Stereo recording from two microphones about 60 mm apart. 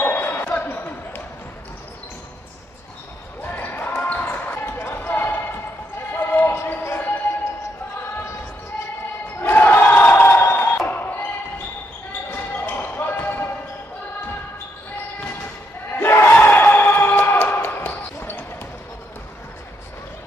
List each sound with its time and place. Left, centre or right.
0.0 s basketball bounce: left
3.4 s basketball bounce: left
9.4 s crowd: left
10.9 s basketball bounce: left
15.9 s battle cry: left
16.3 s a sound: left